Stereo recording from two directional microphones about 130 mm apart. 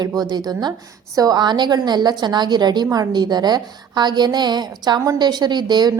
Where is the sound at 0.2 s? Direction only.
30° right (ahead or behind).